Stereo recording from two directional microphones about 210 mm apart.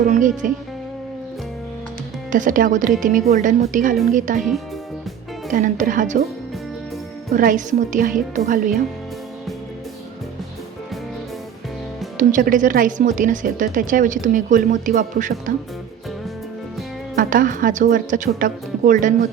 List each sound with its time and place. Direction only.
0.0 s speech: 40° right (ahead or behind)
2.3 s speech: 40° right (ahead or behind)
5.5 s speech: 40° right (ahead or behind)
7.3 s speech: 40° right (ahead or behind)
12.1 s speech: 40° right (ahead or behind)
17.2 s speech: 40° right (ahead or behind)